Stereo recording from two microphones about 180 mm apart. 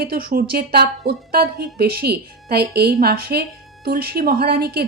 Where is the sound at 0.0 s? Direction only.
55° right (ahead or behind).